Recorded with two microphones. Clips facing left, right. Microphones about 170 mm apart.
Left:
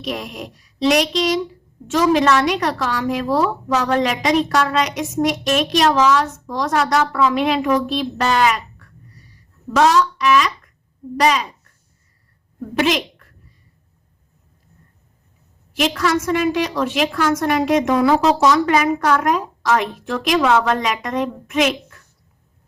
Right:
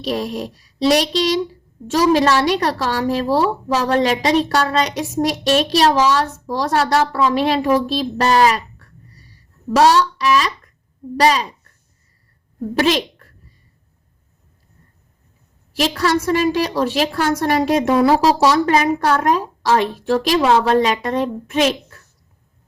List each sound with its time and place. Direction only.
0.0 s a woman's voice: 35° right (ahead or behind)
12.8 s a woman's voice: 35° right (ahead or behind)
15.7 s a woman's voice: 35° right (ahead or behind)